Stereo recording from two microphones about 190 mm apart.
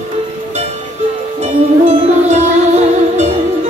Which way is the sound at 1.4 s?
35° right (ahead or behind).